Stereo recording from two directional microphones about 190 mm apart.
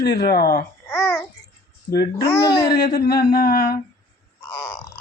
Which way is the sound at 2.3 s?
55° left (ahead or behind).